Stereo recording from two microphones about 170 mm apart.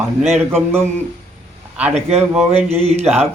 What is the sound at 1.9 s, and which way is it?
Speech, 40° right (ahead or behind).